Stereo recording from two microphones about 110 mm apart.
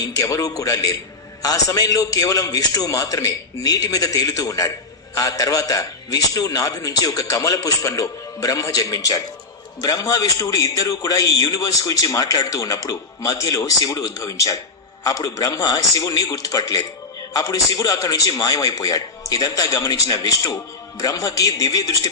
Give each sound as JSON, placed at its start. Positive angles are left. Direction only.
{"t": 0.0, "sound": "a man's voice", "side_deg": 35}